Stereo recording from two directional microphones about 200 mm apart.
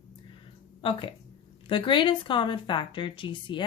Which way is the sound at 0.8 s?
25° left (ahead or behind).